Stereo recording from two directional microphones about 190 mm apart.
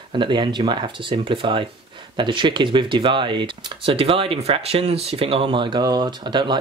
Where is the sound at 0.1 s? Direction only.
25° right (ahead or behind).